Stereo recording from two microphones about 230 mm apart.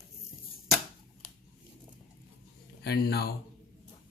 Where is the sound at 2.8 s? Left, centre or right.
Left.